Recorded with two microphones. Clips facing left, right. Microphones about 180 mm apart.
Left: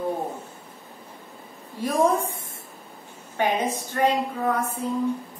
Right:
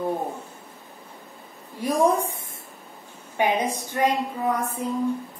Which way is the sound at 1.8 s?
15° right (ahead or behind).